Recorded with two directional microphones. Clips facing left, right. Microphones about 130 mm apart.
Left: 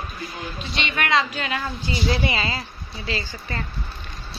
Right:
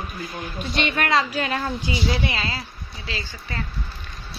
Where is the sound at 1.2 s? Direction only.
35° right (ahead or behind).